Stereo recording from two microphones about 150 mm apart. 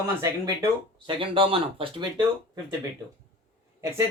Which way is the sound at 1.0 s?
35° right (ahead or behind).